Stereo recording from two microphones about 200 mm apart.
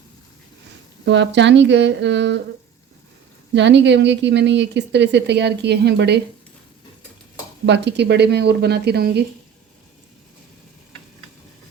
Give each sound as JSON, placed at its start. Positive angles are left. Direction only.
{"t": 1.0, "sound": "a woman's voice", "side_deg": -60}
{"t": 3.5, "sound": "a woman's voice", "side_deg": -60}
{"t": 7.6, "sound": "a woman's voice", "side_deg": -60}